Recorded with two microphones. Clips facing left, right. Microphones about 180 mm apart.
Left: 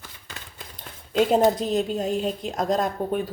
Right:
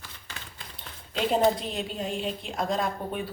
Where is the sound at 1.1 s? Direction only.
45° left (ahead or behind).